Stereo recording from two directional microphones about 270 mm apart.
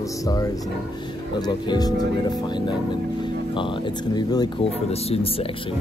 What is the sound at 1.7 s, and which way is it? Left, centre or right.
Speech, centre.